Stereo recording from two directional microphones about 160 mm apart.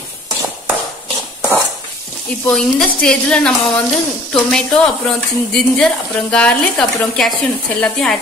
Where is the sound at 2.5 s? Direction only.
5° left (ahead or behind).